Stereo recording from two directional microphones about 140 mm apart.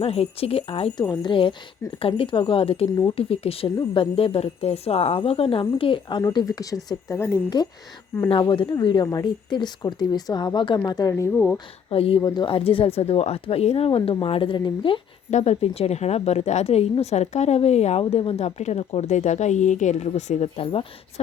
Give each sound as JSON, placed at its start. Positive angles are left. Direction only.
{"t": 0.0, "sound": "a woman's voice", "side_deg": 45}
{"t": 6.2, "sound": "speech", "side_deg": 25}
{"t": 7.5, "sound": "speech", "side_deg": 30}
{"t": 11.1, "sound": "speech", "side_deg": 15}
{"t": 11.9, "sound": "a woman's voice", "side_deg": 40}
{"t": 12.2, "sound": "speech", "side_deg": 30}
{"t": 15.3, "sound": "a woman's voice", "side_deg": 55}